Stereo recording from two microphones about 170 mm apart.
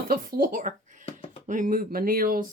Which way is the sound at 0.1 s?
55° right (ahead or behind).